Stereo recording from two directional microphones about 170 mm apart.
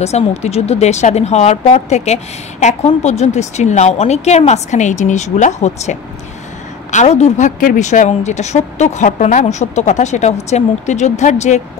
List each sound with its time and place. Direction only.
0.0 s a woman's voice: 40° left (ahead or behind)